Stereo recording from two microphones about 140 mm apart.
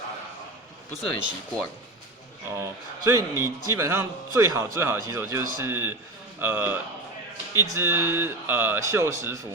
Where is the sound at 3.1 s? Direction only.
20° right (ahead or behind).